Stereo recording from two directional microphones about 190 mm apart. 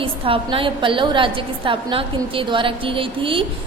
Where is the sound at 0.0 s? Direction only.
25° right (ahead or behind).